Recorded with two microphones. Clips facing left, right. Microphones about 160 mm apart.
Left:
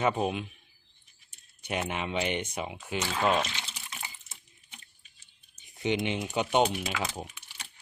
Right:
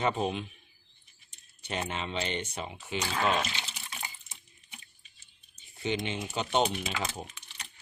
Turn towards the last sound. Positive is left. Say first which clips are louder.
# left 2 dB
turn(degrees=10)  # may be behind; listen again after turning